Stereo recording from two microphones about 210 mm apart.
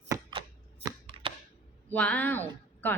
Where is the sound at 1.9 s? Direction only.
5° left (ahead or behind).